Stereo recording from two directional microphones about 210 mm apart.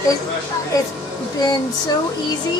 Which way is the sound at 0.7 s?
15° left (ahead or behind).